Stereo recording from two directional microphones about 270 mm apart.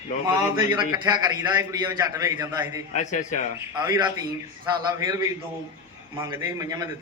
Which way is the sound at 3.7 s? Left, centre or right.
Centre.